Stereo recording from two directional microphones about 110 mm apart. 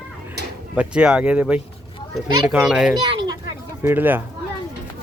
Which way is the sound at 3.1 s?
45° right (ahead or behind).